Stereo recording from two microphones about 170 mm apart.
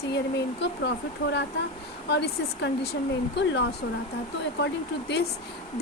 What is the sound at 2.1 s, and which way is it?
Speech, 80° left.